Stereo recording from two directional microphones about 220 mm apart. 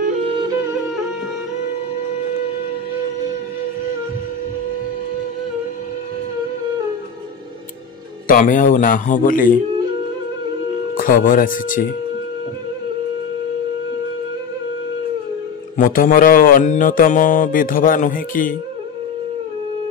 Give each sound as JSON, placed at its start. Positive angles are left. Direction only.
{"t": 0.0, "sound": "music", "side_deg": -25}
{"t": 8.3, "sound": "mantra", "side_deg": 40}
{"t": 11.0, "sound": "mantra", "side_deg": 40}
{"t": 15.8, "sound": "mantra", "side_deg": 40}